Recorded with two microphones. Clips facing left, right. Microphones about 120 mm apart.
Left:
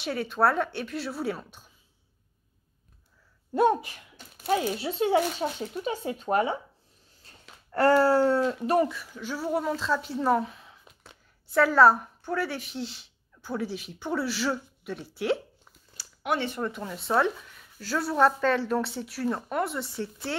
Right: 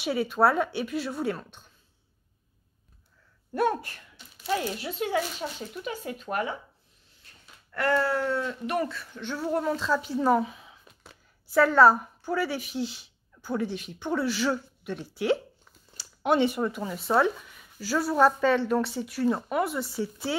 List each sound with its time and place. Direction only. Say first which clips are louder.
0.0 s speech: right 2 dB; 5° right (ahead or behind)
3.5 s speech: left 3 dB; 20° left (ahead or behind)
4.7 s speech: left 4 dB; 30° left (ahead or behind)
7.2 s a sound: left 4 dB; 35° left (ahead or behind)
8.5 s speech: left 5 dB; 35° left (ahead or behind)
8.8 s speech: left 1 dB; 10° left (ahead or behind)
16.0 s a sound: right 5 dB; 25° right (ahead or behind)
16.4 s speech: right 4 dB; 5° right (ahead or behind)